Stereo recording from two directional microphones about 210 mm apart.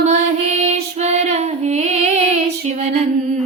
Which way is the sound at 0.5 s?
30° right (ahead or behind).